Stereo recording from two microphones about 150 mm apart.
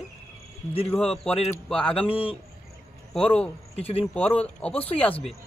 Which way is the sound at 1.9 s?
35° left (ahead or behind).